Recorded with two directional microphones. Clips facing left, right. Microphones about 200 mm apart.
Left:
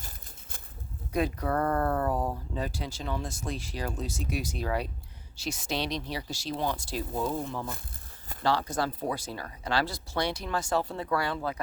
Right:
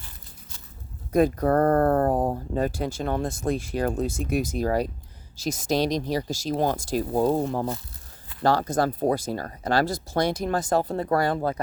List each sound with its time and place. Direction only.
1.1 s speech: 45° right (ahead or behind)